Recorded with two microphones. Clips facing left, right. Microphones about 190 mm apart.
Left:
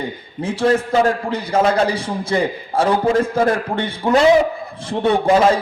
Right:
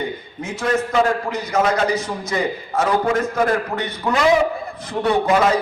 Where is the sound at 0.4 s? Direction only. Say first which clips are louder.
Left 4 dB; 30° left (ahead or behind).